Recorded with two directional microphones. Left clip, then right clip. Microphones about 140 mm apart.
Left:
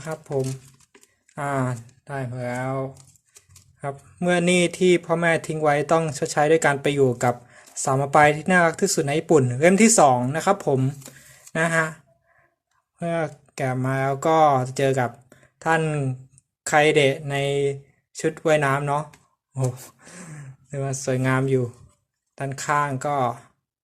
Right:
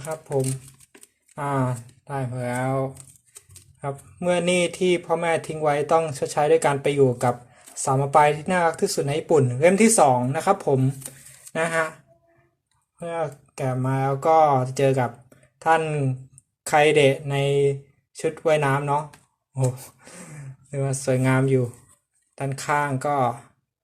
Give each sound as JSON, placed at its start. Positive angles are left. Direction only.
{"t": 1.4, "sound": "speech", "side_deg": 35}
{"t": 2.4, "sound": "speech", "side_deg": 0}
{"t": 4.2, "sound": "speech", "side_deg": 40}
{"t": 13.0, "sound": "speech", "side_deg": 55}